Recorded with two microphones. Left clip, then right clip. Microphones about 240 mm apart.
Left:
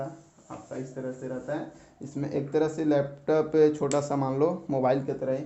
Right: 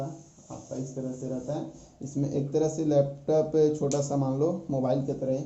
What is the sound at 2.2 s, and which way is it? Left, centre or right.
Speech, left.